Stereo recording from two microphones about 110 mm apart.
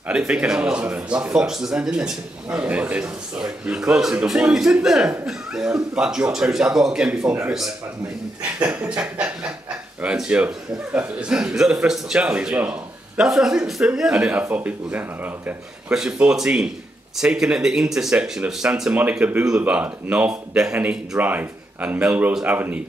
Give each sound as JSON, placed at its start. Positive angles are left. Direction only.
{"t": 0.1, "sound": "speech", "side_deg": -10}
{"t": 8.8, "sound": "speech", "side_deg": -10}